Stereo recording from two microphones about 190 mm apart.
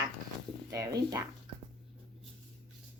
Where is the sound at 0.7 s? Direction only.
15° right (ahead or behind).